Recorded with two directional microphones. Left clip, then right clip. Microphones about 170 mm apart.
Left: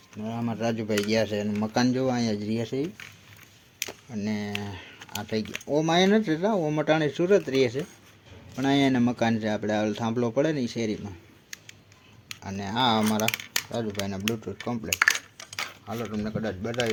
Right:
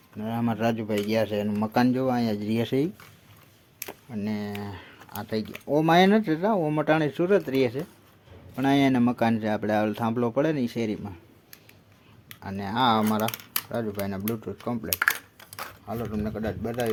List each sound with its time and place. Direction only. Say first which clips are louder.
0.2 s speech: right 3 dB; 20° right (ahead or behind)
1.0 s speech: right 2 dB; 5° right (ahead or behind)
3.8 s speech: left 2 dB; centre (ahead or behind)
5.7 s speech: right 2 dB; 15° right (ahead or behind)
12.4 s speech: right 1 dB; 5° right (ahead or behind)